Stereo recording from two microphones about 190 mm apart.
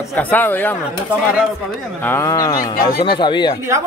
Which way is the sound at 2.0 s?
10° left (ahead or behind).